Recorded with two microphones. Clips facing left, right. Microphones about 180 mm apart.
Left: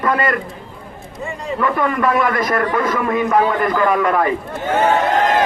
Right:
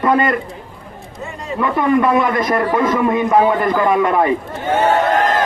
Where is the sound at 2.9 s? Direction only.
20° right (ahead or behind).